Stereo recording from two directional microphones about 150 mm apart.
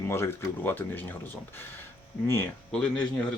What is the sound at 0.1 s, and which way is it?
Speech, 15° left (ahead or behind).